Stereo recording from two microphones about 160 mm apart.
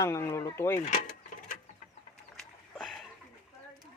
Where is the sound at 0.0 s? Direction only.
20° left (ahead or behind).